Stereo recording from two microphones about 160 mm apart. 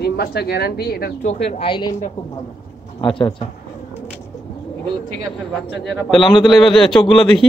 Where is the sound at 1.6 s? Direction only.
30° left (ahead or behind).